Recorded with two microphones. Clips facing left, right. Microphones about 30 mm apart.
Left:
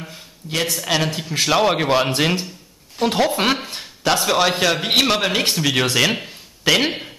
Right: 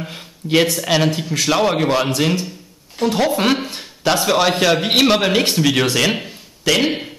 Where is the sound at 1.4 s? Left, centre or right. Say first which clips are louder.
Even; centre.